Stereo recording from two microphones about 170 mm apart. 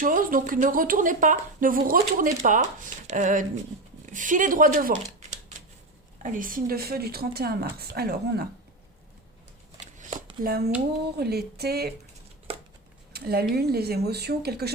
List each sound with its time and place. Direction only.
0.0 s speech: 55° right (ahead or behind)
6.2 s a woman's voice: 50° right (ahead or behind)
9.8 s shuffling cards: 45° right (ahead or behind)
10.4 s a woman's voice: 65° right (ahead or behind)
13.1 s speech: 65° right (ahead or behind)